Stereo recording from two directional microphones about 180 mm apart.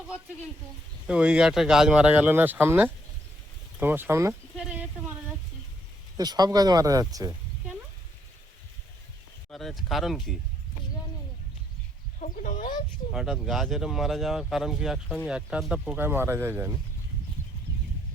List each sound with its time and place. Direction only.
1.0 s speech: 5° right (ahead or behind)
4.5 s a sound: 5° right (ahead or behind)
6.1 s speech: 20° right (ahead or behind)
9.5 s speech: centre (ahead or behind)
12.2 s speech: 45° left (ahead or behind)
13.1 s speech: 5° right (ahead or behind)